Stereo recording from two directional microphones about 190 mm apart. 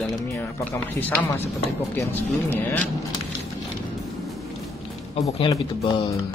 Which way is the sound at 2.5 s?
10° left (ahead or behind).